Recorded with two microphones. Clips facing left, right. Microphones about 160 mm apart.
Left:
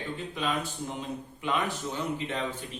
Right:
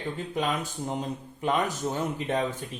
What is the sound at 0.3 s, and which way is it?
Speech, 45° right (ahead or behind).